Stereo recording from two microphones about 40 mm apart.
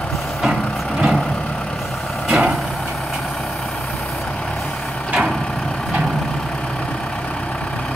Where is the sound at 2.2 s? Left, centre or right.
Right.